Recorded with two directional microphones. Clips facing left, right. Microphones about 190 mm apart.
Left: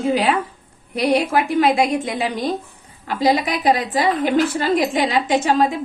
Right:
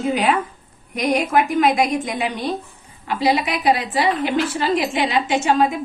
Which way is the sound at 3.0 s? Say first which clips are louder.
Left 1 dB; 40° left (ahead or behind).